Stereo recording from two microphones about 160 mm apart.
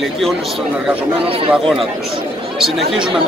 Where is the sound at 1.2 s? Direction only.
35° right (ahead or behind).